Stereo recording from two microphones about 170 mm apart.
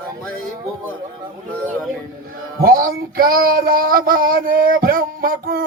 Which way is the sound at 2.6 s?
60° right (ahead or behind).